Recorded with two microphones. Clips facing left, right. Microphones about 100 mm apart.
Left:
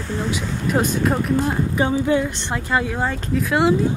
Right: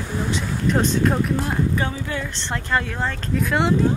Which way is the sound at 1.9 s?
25° left (ahead or behind).